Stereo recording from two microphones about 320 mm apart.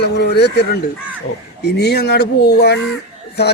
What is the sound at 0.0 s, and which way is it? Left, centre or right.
Speech, left.